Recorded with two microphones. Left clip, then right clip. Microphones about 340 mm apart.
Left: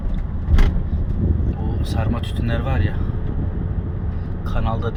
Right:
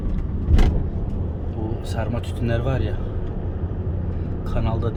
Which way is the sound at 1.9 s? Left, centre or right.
Left.